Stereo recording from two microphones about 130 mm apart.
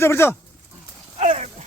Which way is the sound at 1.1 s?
55° right (ahead or behind).